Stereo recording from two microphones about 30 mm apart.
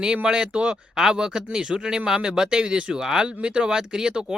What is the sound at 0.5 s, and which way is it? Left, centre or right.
Speech, right.